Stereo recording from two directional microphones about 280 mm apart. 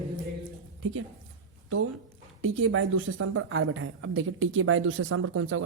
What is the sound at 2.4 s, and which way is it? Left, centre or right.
Speech, right.